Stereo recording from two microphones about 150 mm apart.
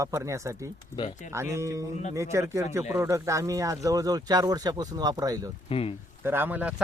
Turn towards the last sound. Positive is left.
turn(degrees=-10)  # may be behind; listen again after turning